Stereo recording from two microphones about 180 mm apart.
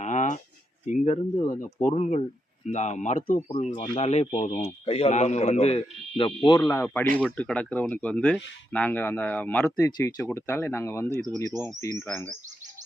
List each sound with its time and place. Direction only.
0.0 s a sound: 45° left (ahead or behind)
0.9 s a man's voice: 40° left (ahead or behind)
4.5 s a man's voice: 35° left (ahead or behind)
6.7 s speech: 10° left (ahead or behind)